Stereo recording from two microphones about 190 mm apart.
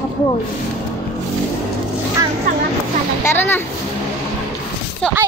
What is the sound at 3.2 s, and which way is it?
Speech, 10° left (ahead or behind).